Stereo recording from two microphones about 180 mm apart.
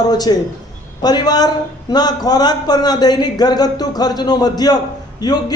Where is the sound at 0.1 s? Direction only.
20° left (ahead or behind).